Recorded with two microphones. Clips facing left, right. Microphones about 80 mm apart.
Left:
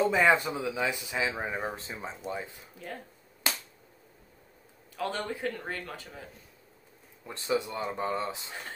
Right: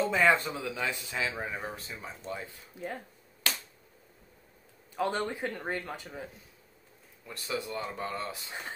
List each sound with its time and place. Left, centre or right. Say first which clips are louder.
0.0 s speech: left 2 dB; centre
1.6 s speech: left 4 dB; left
3.4 s a sound: left 1 dB; centre
4.9 s a man's voice: right 2 dB; right
7.2 s speech: left 5 dB; left